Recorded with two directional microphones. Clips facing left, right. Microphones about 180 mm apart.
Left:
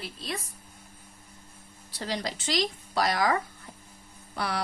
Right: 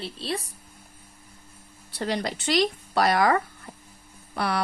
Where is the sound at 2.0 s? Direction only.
60° right (ahead or behind).